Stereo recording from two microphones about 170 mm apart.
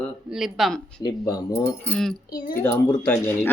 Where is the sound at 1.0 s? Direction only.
20° left (ahead or behind).